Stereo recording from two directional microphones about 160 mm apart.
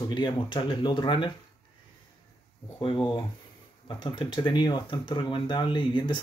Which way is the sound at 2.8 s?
30° left (ahead or behind).